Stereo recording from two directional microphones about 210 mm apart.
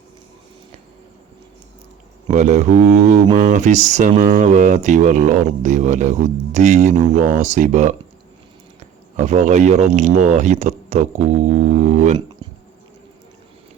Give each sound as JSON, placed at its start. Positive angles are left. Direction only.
{"t": 2.3, "sound": "speech", "side_deg": -35}
{"t": 9.1, "sound": "speech", "side_deg": -35}
{"t": 12.4, "sound": "bee", "side_deg": -20}